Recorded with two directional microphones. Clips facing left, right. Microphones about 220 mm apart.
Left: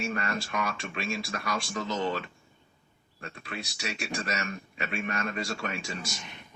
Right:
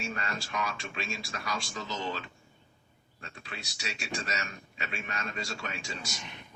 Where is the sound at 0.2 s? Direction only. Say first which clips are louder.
Left 3 dB; 55° left (ahead or behind).